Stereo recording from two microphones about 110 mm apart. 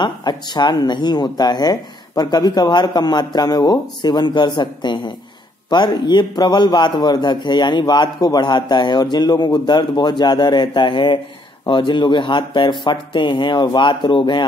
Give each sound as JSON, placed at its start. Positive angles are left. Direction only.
{"t": 0.0, "sound": "a man's voice", "side_deg": 40}